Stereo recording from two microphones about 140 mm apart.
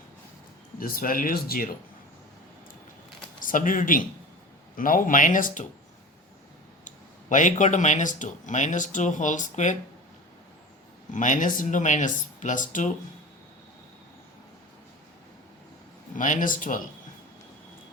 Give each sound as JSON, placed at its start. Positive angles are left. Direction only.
{"t": 0.8, "sound": "speech", "side_deg": 90}
{"t": 3.4, "sound": "speech", "side_deg": 70}
{"t": 6.8, "sound": "speech", "side_deg": 65}
{"t": 11.1, "sound": "speech", "side_deg": 65}
{"t": 16.1, "sound": "speech", "side_deg": 65}